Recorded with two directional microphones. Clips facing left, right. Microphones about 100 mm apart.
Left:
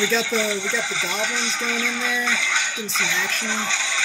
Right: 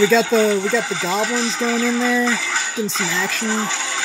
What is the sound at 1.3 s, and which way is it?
Speech, centre (ahead or behind).